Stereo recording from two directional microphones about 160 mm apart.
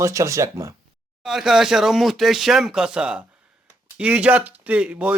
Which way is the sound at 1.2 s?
Centre (ahead or behind).